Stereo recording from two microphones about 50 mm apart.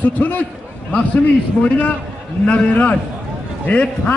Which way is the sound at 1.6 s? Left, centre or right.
Left.